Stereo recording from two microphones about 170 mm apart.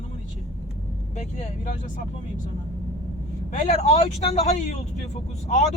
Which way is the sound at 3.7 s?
40° left (ahead or behind).